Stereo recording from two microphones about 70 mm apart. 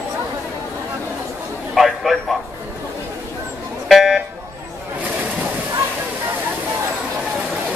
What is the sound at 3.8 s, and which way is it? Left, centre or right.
Music, centre.